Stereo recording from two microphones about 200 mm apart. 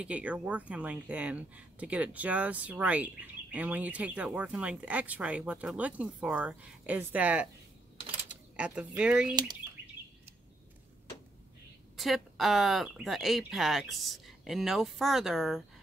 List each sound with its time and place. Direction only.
0.0 s speech: 5° right (ahead or behind)
8.5 s speech: 5° right (ahead or behind)
9.3 s speech: 20° right (ahead or behind)
12.0 s speech: centre (ahead or behind)